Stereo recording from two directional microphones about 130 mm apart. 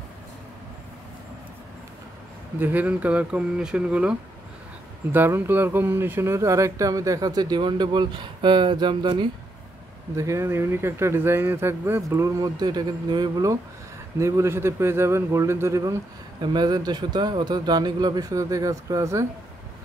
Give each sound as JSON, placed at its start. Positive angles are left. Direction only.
{"t": 2.6, "sound": "speech", "side_deg": -10}
{"t": 10.1, "sound": "a man's voice", "side_deg": -25}